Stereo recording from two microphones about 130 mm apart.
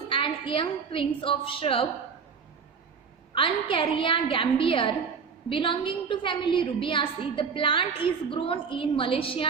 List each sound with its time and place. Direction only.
0.1 s a woman's voice: 40° left (ahead or behind)
3.3 s a woman's voice: 40° left (ahead or behind)